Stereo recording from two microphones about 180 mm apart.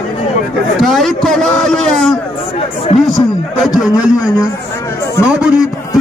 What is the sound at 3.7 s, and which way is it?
Speech, 5° right (ahead or behind).